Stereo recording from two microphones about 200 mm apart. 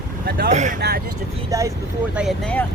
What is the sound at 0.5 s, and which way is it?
Speech, 35° right (ahead or behind).